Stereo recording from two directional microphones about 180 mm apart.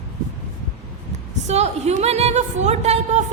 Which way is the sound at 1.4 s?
35° right (ahead or behind).